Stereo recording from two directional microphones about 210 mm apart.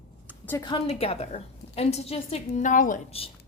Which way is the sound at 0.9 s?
30° left (ahead or behind).